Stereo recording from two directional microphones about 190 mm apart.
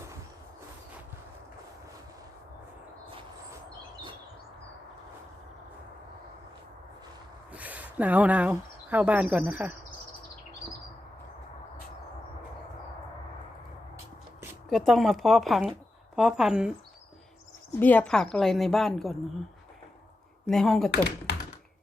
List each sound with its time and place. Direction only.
7.5 s speech: 10° right (ahead or behind)
14.7 s a woman's voice: centre (ahead or behind)
17.7 s a woman's voice: 10° left (ahead or behind)
20.5 s a woman's voice: centre (ahead or behind)
21.3 s computer keyboard: 60° left (ahead or behind)